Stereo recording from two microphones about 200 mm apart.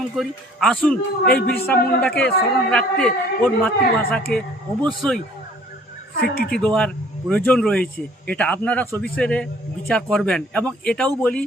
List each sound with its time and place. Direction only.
0.2 s a man's voice: 5° left (ahead or behind)
1.2 s speech: 45° left (ahead or behind)
1.5 s a man's voice: 10° left (ahead or behind)
6.1 s speech: 50° left (ahead or behind)
6.5 s a man's voice: 5° left (ahead or behind)